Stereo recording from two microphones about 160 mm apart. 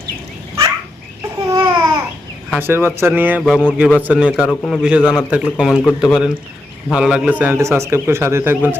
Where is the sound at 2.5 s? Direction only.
10° right (ahead or behind).